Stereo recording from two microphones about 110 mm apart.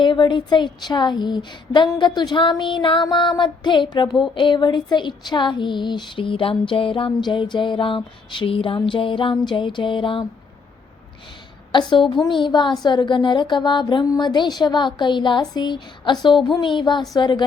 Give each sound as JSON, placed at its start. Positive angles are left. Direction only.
{"t": 0.0, "sound": "speech", "side_deg": 45}
{"t": 11.7, "sound": "speech", "side_deg": 45}
{"t": 16.6, "sound": "a sound", "side_deg": 45}
{"t": 17.2, "sound": "speech", "side_deg": 45}